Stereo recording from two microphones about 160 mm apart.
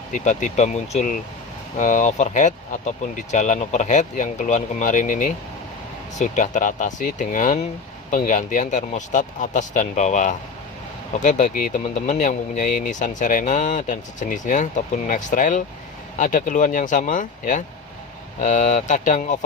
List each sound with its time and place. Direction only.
0.1 s speech: 50° left (ahead or behind)